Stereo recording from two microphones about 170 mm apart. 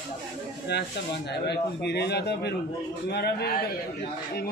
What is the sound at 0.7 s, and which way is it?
A man's voice, 80° left.